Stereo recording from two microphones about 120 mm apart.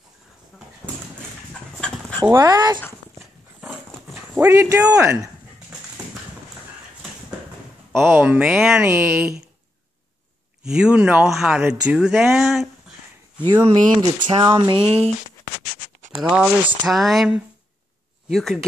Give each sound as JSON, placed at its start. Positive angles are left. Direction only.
{"t": 1.8, "sound": "chicken", "side_deg": 10}
{"t": 2.3, "sound": "speech", "side_deg": -30}
{"t": 4.1, "sound": "dog", "side_deg": -20}
{"t": 4.7, "sound": "speech", "side_deg": -10}
{"t": 5.0, "sound": "speech", "side_deg": -25}
{"t": 8.1, "sound": "speech", "side_deg": -10}
{"t": 10.6, "sound": "speech", "side_deg": -5}
{"t": 13.7, "sound": "speech", "side_deg": -50}
{"t": 16.2, "sound": "speech", "side_deg": -10}